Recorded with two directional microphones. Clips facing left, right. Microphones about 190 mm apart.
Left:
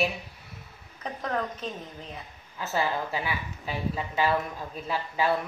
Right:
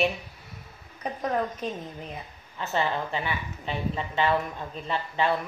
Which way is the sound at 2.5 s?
5° left (ahead or behind).